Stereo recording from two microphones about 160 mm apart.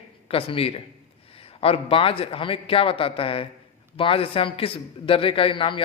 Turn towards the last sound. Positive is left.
turn(degrees=30)  # may be behind; listen again after turning